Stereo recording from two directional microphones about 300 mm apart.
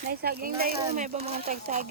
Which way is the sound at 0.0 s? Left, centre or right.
Right.